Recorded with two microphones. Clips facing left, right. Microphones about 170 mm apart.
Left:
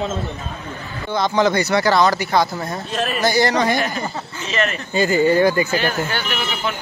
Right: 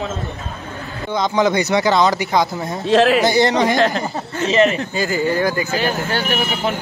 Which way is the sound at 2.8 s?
90° right.